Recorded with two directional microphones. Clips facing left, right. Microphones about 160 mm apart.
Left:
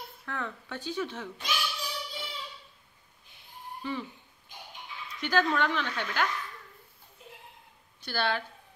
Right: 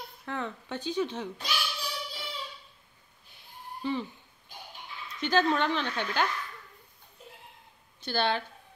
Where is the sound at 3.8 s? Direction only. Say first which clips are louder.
Right 4 dB; 30° right (ahead or behind).